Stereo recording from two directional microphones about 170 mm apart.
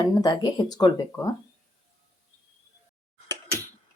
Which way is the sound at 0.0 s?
20° left (ahead or behind).